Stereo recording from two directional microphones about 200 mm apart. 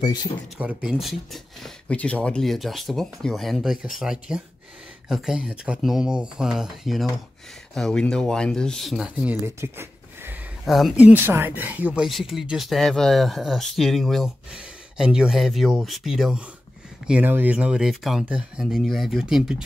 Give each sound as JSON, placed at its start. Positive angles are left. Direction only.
{"t": 0.0, "sound": "speech", "side_deg": 20}
{"t": 0.6, "sound": "speech", "side_deg": -5}
{"t": 10.6, "sound": "speech", "side_deg": 0}